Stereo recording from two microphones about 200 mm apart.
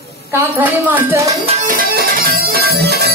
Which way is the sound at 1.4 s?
35° right (ahead or behind).